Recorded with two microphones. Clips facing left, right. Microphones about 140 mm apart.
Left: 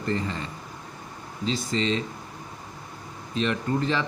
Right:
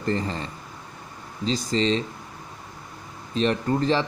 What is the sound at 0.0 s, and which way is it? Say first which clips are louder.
Speech: right 2 dB; 35° right (ahead or behind).